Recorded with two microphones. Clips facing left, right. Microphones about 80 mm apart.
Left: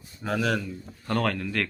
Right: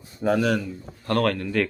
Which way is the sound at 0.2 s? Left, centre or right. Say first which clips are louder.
Right 5 dB; centre.